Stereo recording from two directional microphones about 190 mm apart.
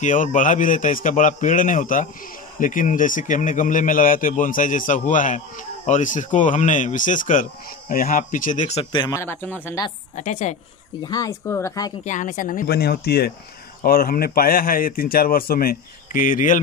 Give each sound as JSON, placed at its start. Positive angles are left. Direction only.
{"t": 0.0, "sound": "a man's voice", "side_deg": 40}
{"t": 9.2, "sound": "speech", "side_deg": 10}
{"t": 10.1, "sound": "speech", "side_deg": 35}
{"t": 11.1, "sound": "speech", "side_deg": 20}
{"t": 12.0, "sound": "a man's voice", "side_deg": 40}